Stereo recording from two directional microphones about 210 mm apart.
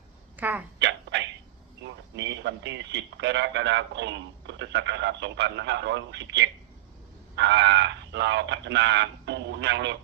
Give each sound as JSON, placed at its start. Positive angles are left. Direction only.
{"t": 0.3, "sound": "speech", "side_deg": -10}
{"t": 0.8, "sound": "a sound", "side_deg": -55}
{"t": 1.8, "sound": "speech", "side_deg": -55}